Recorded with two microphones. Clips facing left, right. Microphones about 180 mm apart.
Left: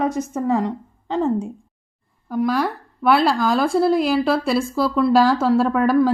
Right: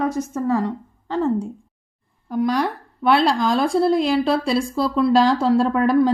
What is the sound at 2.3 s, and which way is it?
A woman's voice, 5° left (ahead or behind).